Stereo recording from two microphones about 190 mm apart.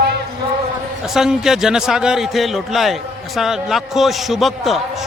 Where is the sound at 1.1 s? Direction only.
Centre (ahead or behind).